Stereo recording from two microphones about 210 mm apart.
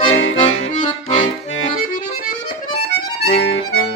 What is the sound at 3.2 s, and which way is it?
Accordion, 65° left (ahead or behind).